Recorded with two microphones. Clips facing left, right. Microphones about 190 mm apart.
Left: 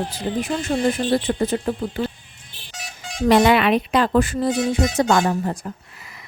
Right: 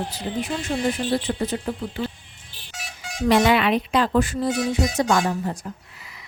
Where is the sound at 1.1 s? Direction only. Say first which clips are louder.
Left 4 dB; 50° left (ahead or behind).